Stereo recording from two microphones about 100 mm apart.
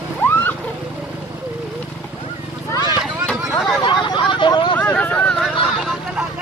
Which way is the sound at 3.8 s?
55° left (ahead or behind).